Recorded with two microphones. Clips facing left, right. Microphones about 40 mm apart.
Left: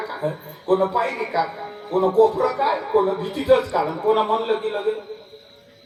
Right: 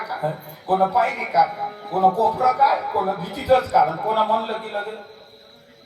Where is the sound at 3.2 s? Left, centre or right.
Left.